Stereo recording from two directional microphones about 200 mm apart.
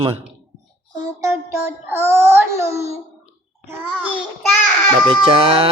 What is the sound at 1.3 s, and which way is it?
Child singing, 10° right (ahead or behind).